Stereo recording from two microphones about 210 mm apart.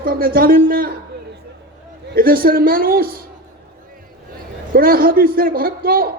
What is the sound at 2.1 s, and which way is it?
A man's voice, 45° right (ahead or behind).